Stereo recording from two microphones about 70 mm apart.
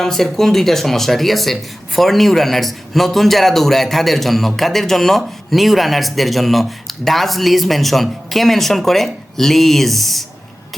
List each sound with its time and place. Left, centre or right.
0.0 s a man's voice: centre